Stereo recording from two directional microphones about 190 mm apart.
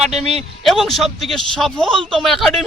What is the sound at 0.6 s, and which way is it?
A man's voice, centre (ahead or behind).